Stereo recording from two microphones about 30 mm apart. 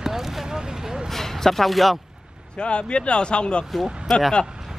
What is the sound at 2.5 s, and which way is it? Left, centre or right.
Speech, left.